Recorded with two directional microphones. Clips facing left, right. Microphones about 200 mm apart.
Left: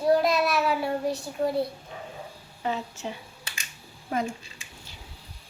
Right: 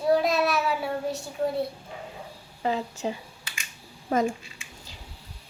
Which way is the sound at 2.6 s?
30° right (ahead or behind).